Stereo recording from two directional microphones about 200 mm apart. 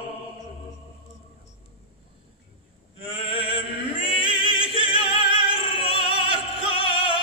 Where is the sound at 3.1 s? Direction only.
30° left (ahead or behind).